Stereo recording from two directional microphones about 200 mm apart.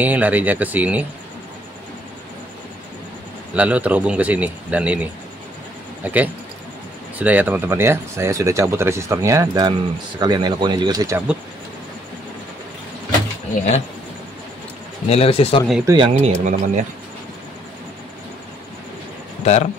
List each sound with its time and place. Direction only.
0.0 s speech: 10° right (ahead or behind)
3.5 s speech: 5° right (ahead or behind)
6.0 s speech: 10° right (ahead or behind)
15.0 s speech: 30° left (ahead or behind)
15.9 s speech: 30° right (ahead or behind)
19.4 s speech: 35° left (ahead or behind)